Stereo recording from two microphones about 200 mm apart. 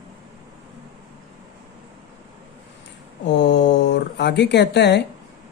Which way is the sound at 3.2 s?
60° left (ahead or behind).